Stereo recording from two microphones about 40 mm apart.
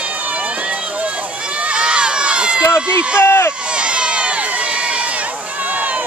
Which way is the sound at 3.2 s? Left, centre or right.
Left.